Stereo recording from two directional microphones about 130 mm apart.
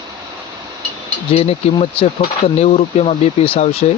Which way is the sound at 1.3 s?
50° left (ahead or behind).